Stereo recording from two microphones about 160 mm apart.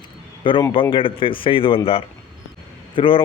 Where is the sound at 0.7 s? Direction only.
30° left (ahead or behind).